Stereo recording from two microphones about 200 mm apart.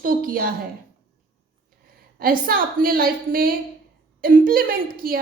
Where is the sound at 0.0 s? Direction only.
45° right (ahead or behind).